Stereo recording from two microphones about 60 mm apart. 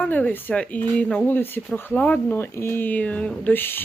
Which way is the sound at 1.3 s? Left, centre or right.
Left.